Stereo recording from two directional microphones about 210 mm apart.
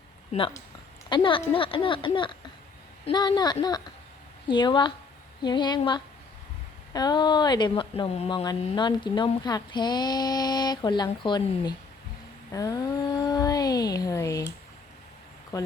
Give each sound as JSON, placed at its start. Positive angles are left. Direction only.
{"t": 0.3, "sound": "speech", "side_deg": 30}
{"t": 15.5, "sound": "speech", "side_deg": 15}